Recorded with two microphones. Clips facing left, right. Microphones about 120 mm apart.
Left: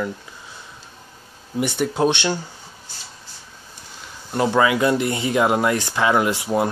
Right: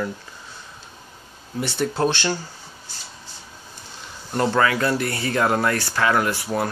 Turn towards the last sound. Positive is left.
turn(degrees=15)  # may be behind; listen again after turning